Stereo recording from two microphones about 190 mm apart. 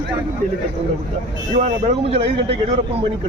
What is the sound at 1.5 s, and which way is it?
Speech, 40° right (ahead or behind).